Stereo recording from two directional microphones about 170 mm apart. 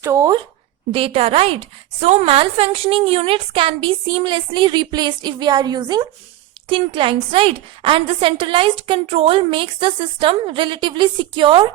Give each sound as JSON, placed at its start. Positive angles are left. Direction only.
{"t": 0.0, "sound": "a woman's voice", "side_deg": -15}
{"t": 0.9, "sound": "a woman's voice", "side_deg": -35}